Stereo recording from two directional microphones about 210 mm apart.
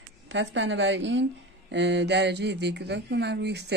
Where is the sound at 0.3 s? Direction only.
60° right (ahead or behind).